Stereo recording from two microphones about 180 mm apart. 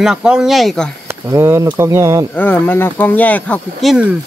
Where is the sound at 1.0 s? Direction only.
15° right (ahead or behind).